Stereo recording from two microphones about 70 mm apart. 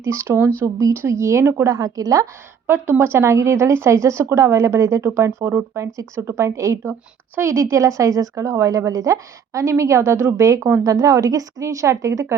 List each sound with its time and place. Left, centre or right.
0.0 s a woman's voice: right
2.6 s a woman's voice: right